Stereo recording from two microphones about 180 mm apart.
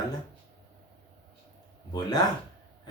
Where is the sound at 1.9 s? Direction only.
20° left (ahead or behind).